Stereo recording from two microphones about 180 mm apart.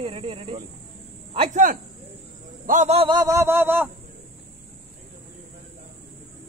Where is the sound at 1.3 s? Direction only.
40° right (ahead or behind); by 3.8 s 10° right (ahead or behind).